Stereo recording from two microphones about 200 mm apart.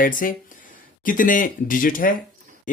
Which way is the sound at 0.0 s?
45° left (ahead or behind).